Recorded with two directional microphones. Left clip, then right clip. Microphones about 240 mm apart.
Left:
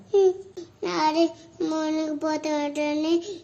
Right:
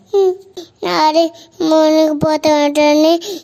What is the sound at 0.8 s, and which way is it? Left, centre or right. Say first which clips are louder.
Child singing: right 10 dB; right.